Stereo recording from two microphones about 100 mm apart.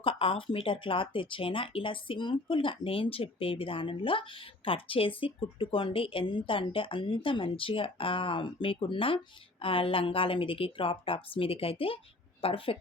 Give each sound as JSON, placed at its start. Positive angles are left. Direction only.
{"t": 0.0, "sound": "speech", "side_deg": 65}